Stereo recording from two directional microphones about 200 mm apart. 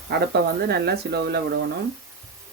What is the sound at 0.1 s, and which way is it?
Speech, 55° right (ahead or behind).